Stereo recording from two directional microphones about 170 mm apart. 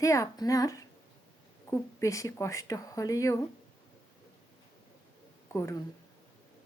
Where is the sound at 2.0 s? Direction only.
20° left (ahead or behind).